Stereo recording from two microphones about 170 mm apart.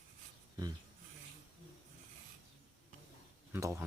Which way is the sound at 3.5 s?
15° right (ahead or behind).